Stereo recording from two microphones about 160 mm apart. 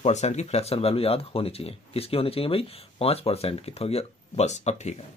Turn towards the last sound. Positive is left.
turn(degrees=45)  # may be behind; listen again after turning